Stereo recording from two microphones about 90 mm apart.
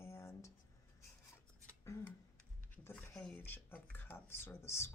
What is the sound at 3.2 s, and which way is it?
Speech, 15° left (ahead or behind).